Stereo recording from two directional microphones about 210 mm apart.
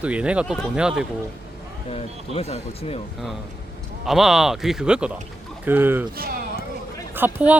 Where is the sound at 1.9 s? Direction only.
30° left (ahead or behind).